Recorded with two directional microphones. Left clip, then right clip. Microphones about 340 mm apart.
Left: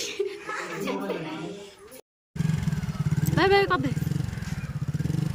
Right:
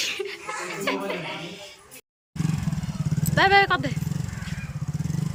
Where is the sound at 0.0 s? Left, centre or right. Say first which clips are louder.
Right 2 dB; centre.